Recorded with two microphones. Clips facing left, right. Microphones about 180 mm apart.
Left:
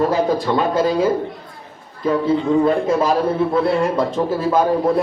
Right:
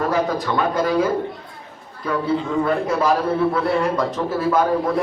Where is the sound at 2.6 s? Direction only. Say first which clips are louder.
Left 3 dB; 25° left (ahead or behind).